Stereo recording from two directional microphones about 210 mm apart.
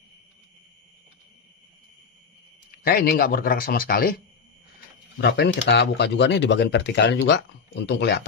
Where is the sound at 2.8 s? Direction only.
50° left (ahead or behind).